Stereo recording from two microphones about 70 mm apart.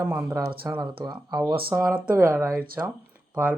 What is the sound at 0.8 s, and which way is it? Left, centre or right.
Speech, right.